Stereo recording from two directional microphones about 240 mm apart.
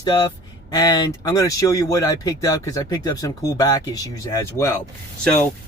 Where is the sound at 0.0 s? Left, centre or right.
Centre.